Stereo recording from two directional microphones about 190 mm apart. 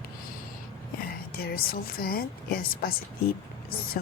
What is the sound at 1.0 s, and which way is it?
A woman's voice, 50° left (ahead or behind).